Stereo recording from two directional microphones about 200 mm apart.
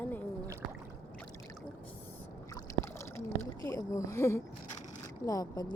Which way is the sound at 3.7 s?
15° left (ahead or behind).